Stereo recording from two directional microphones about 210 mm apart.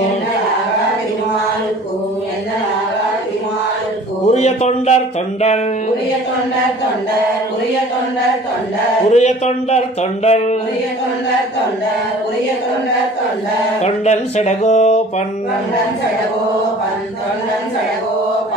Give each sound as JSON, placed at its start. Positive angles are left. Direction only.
{"t": 4.3, "sound": "a sound", "side_deg": 30}
{"t": 9.1, "sound": "speech", "side_deg": 30}
{"t": 13.8, "sound": "speech", "side_deg": 30}